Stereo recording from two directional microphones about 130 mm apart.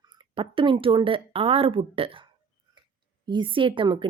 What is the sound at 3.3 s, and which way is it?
Speech, 40° right (ahead or behind).